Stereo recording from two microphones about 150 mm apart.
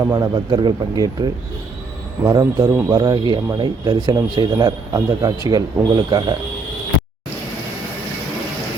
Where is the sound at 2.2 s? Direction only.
25° right (ahead or behind).